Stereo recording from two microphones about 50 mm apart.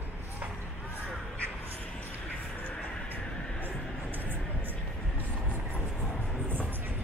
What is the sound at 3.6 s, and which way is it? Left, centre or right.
Music, right.